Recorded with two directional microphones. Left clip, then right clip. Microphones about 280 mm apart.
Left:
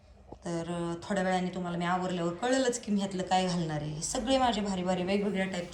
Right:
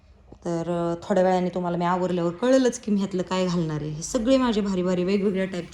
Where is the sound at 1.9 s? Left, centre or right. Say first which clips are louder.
Right 6 dB; centre.